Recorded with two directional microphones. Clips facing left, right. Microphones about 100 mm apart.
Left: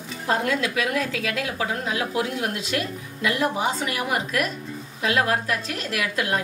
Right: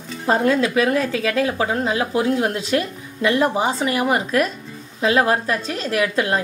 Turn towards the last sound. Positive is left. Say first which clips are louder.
# right 5 dB
turn(degrees=-30)  # may be behind; listen again after turning